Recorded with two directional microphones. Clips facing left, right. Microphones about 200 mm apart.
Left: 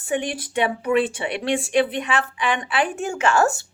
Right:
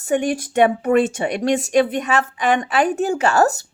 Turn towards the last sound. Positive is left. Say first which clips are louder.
# right 3 dB
turn(degrees=-40)  # may be behind; listen again after turning